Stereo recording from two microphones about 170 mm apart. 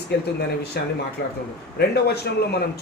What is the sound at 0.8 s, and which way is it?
Speech, 70° left (ahead or behind).